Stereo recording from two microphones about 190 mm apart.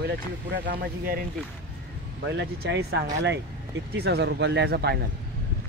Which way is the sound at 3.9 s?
60° right (ahead or behind).